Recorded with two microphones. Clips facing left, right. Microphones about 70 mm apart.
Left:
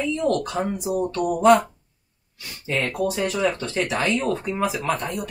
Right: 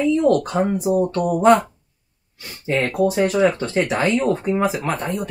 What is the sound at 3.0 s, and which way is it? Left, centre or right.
Speech, right.